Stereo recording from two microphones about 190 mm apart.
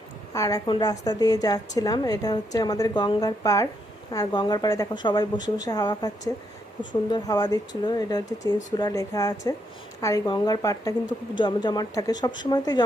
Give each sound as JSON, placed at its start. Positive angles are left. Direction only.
{"t": 0.3, "sound": "speech", "side_deg": 20}